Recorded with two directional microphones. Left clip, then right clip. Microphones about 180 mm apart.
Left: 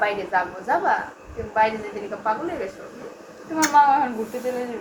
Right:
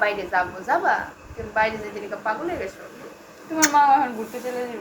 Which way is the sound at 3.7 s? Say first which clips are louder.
Left 1 dB; 5° left (ahead or behind).